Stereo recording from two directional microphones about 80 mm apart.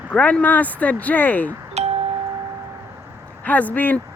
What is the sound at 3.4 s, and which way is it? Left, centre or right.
Speech, centre.